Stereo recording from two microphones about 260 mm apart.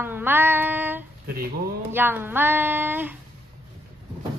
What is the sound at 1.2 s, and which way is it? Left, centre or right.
Speech, right.